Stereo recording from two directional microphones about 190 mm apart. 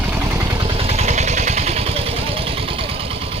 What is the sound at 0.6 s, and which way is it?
Vehicle, 30° right (ahead or behind).